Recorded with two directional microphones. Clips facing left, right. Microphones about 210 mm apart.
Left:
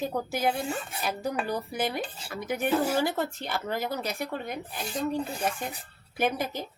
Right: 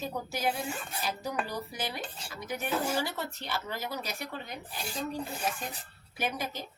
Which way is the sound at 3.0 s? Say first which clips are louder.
Left 7 dB; 50° left (ahead or behind).